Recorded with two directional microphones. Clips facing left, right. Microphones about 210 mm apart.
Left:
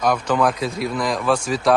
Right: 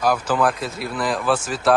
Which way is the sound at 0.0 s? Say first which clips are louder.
Left 1 dB; 5° right (ahead or behind).